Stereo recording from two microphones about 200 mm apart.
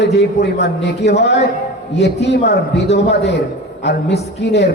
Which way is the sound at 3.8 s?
55° left (ahead or behind).